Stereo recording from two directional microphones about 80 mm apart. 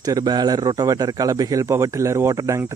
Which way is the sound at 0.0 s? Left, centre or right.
Right.